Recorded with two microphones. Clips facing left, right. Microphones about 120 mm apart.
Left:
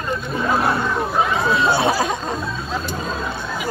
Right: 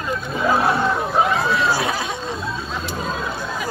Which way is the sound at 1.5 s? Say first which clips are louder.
Left 3 dB; 25° left (ahead or behind).